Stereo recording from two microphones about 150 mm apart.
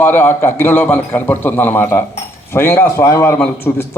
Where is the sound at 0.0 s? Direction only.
10° left (ahead or behind).